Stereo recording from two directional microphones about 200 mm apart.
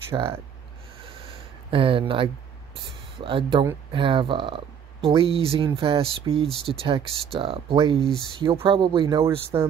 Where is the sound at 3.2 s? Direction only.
25° right (ahead or behind).